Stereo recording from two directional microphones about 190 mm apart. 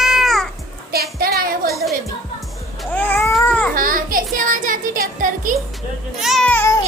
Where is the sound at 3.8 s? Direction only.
45° right (ahead or behind).